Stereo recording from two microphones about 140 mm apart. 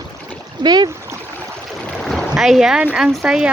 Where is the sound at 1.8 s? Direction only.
5° left (ahead or behind).